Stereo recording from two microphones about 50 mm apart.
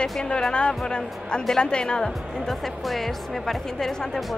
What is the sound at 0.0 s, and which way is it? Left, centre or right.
Speech, centre.